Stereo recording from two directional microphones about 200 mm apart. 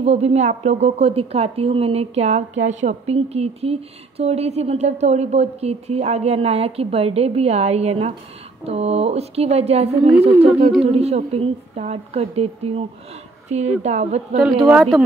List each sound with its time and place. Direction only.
0.0 s a woman's voice: 30° right (ahead or behind)
14.4 s speech: 5° right (ahead or behind)